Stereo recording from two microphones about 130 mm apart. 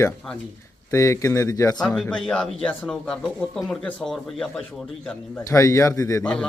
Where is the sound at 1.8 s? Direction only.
5° left (ahead or behind).